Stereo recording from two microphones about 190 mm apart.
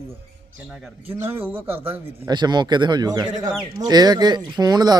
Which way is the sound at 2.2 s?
25° right (ahead or behind).